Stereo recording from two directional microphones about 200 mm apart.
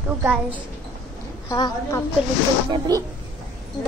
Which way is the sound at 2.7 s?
20° right (ahead or behind).